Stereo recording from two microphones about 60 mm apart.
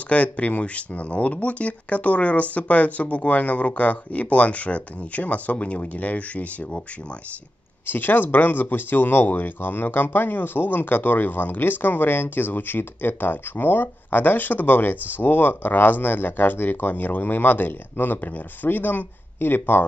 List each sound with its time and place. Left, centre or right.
0.1 s speech: left
7.8 s speech: left